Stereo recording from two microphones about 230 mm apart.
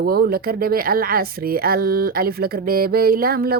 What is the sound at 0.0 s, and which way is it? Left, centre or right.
Speech, right.